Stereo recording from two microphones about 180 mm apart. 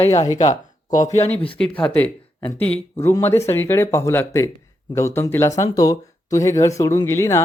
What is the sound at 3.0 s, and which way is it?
Speech, 15° left (ahead or behind).